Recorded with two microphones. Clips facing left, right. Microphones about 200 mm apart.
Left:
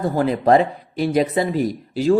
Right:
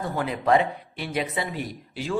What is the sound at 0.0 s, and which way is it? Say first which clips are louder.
Speech: left 8 dB; 40° left (ahead or behind).